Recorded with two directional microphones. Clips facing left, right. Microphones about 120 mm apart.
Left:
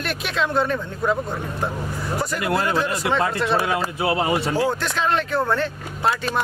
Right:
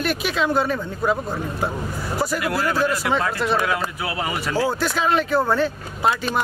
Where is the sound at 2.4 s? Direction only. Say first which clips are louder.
Left 2 dB; 25° left (ahead or behind).